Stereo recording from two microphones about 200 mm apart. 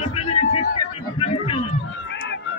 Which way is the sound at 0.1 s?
30° left (ahead or behind).